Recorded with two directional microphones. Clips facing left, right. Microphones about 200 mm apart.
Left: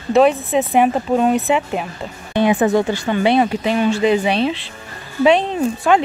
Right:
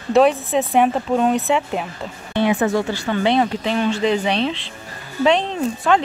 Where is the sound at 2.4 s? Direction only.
15° left (ahead or behind).